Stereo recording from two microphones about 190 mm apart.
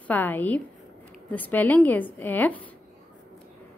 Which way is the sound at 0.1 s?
10° left (ahead or behind).